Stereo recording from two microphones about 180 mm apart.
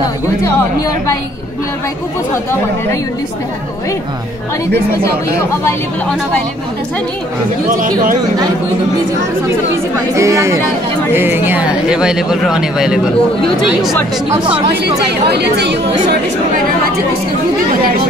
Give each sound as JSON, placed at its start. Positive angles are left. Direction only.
{"t": 5.4, "sound": "speech", "side_deg": 15}
{"t": 9.9, "sound": "speech", "side_deg": -15}
{"t": 14.8, "sound": "speech", "side_deg": -70}